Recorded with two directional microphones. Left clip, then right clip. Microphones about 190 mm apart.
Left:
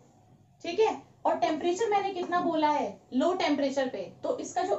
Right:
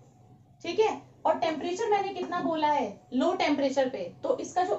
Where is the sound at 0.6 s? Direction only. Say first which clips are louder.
Even; 10° right (ahead or behind).